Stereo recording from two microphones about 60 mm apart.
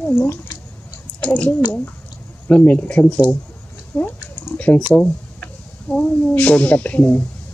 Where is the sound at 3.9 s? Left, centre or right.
Left.